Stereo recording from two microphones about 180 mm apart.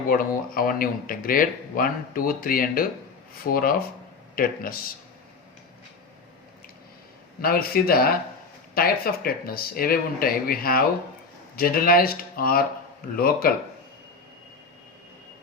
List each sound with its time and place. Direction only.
0.1 s speech: 50° left (ahead or behind)
7.4 s speech: 55° left (ahead or behind)